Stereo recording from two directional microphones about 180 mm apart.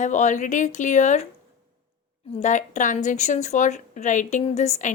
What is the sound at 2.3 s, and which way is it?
A woman's voice, 40° left (ahead or behind).